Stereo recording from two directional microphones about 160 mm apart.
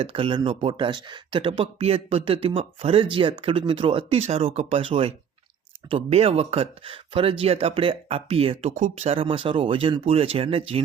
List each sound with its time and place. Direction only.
0.0 s speech: 35° right (ahead or behind)